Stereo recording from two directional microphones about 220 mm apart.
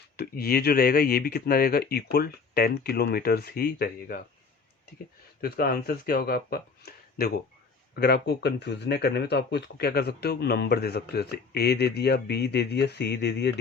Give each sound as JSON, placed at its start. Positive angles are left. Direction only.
{"t": 0.2, "sound": "speech", "side_deg": 45}
{"t": 5.4, "sound": "speech", "side_deg": 45}